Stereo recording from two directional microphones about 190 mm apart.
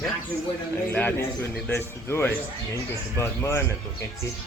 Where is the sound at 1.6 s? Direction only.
10° left (ahead or behind).